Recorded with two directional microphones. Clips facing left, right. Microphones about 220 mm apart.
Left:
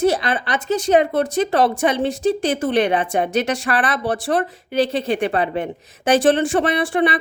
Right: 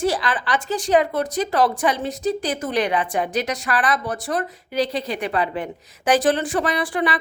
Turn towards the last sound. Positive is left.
turn(degrees=25)  # may be behind; listen again after turning